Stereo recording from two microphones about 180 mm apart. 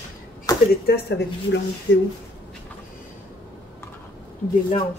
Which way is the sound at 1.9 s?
90° left.